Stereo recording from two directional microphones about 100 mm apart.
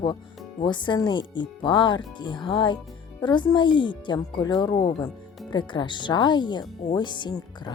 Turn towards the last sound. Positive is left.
turn(degrees=50)  # may be behind; listen again after turning